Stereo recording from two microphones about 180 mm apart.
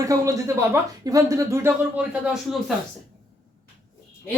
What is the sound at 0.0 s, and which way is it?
Speech, 20° right (ahead or behind).